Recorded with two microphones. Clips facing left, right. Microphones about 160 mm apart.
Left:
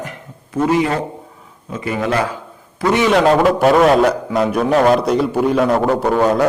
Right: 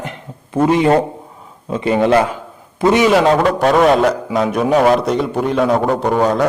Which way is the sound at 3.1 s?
Centre (ahead or behind).